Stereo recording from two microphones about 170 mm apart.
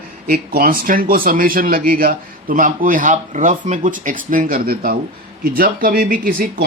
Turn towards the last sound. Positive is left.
turn(degrees=-55)  # may be behind; listen again after turning